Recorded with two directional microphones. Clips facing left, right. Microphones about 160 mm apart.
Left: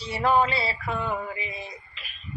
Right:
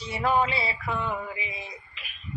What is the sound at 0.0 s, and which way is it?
Male singing, 35° left (ahead or behind).